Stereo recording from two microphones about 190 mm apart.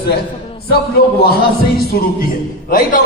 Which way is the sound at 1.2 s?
55° left (ahead or behind).